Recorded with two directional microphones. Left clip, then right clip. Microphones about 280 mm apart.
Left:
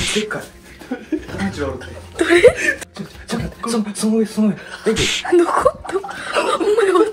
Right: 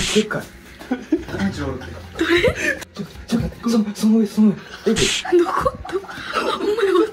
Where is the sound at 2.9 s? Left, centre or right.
Left.